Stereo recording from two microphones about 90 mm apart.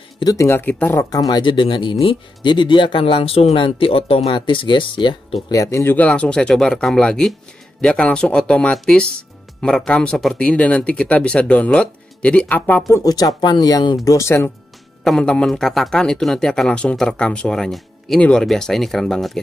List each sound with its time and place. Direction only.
0.2 s speech: 40° left (ahead or behind)
0.5 s speech: 20° left (ahead or behind)
1.1 s speech: 45° left (ahead or behind)
1.4 s speech: 65° left (ahead or behind)
5.5 s speech: 35° left (ahead or behind)
5.9 s speech: 10° left (ahead or behind)
12.8 s speech: 40° left (ahead or behind)
14.0 s speech: 30° left (ahead or behind)
15.0 s speech: 10° left (ahead or behind)